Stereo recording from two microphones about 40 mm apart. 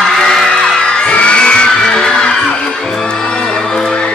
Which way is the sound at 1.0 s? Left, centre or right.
Left.